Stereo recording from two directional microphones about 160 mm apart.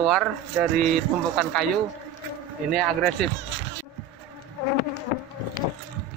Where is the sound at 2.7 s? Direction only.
5° left (ahead or behind).